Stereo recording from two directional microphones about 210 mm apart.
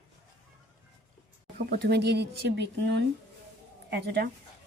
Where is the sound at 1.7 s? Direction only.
50° right (ahead or behind).